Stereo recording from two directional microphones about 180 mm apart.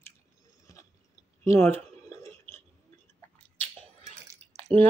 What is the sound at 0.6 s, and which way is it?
Chewing, 15° left (ahead or behind).